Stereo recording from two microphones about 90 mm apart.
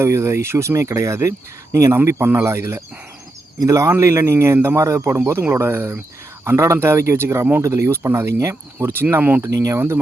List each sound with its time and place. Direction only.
0.0 s speech: 30° right (ahead or behind)
9.4 s speech: 35° right (ahead or behind)